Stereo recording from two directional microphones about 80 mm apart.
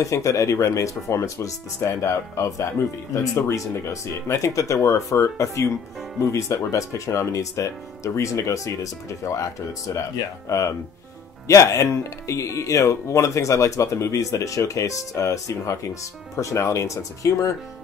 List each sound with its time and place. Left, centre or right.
0.0 s speech: left
11.4 s speech: left